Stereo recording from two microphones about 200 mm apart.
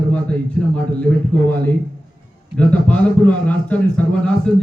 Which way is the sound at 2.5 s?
5° left (ahead or behind).